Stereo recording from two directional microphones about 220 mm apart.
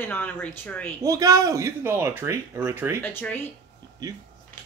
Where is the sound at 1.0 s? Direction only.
15° right (ahead or behind).